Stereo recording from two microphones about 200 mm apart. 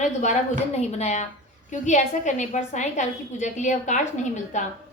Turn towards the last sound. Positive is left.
turn(degrees=35)  # may be behind; listen again after turning